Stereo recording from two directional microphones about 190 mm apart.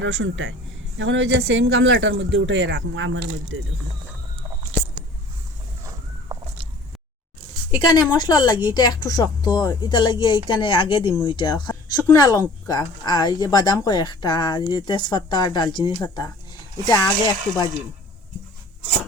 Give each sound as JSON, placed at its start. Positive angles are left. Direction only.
{"t": 0.0, "sound": "speech", "side_deg": -75}
{"t": 7.7, "sound": "speech", "side_deg": 20}